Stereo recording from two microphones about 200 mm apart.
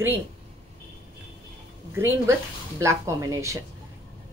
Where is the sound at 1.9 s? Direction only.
10° right (ahead or behind).